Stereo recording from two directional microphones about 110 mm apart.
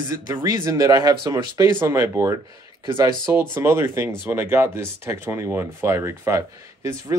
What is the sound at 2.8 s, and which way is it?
Speech, 40° right (ahead or behind).